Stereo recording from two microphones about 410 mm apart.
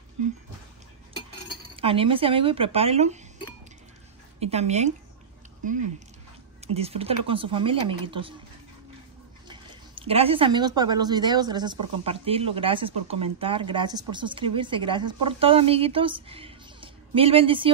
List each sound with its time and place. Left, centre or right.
1.8 s speech: centre
4.4 s speech: centre
6.7 s speech: centre
10.0 s speech: centre